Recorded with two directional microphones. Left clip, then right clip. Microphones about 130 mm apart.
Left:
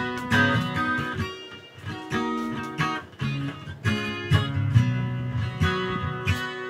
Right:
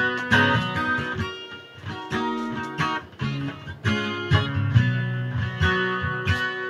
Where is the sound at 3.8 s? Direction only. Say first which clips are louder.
Right 2 dB; 10° left (ahead or behind).